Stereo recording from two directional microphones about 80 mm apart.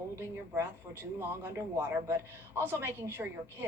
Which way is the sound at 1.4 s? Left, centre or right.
Right.